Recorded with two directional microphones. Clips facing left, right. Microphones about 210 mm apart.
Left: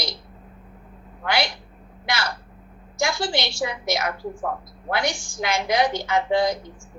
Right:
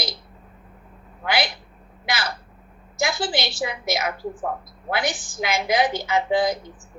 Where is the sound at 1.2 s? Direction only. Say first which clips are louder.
Even; 5° right (ahead or behind).